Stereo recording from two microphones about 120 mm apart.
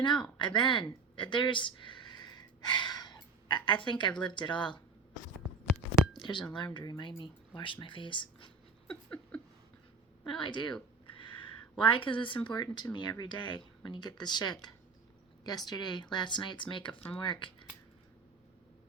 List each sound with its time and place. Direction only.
0.0 s a woman's voice: 40° left (ahead or behind)
6.1 s speech: 40° left (ahead or behind)
8.9 s a sound: 10° left (ahead or behind)
10.2 s speech: 45° left (ahead or behind)
11.8 s speech: 45° left (ahead or behind)